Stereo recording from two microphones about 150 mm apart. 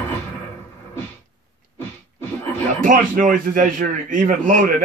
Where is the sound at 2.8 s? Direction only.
65° right (ahead or behind).